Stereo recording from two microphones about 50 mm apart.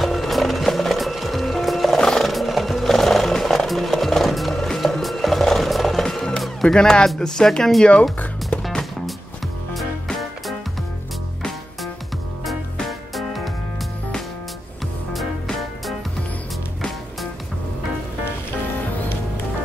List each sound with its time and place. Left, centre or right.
0.0 s music: centre
6.7 s speech: centre
10.0 s music: centre
12.8 s music: centre